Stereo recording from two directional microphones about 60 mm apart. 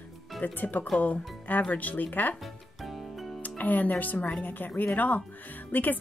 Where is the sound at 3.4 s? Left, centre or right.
Left.